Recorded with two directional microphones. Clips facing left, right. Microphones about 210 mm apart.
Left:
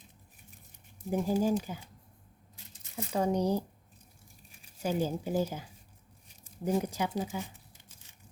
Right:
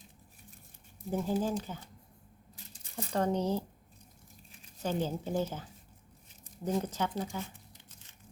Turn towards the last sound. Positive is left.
turn(degrees=10)  # may be behind; listen again after turning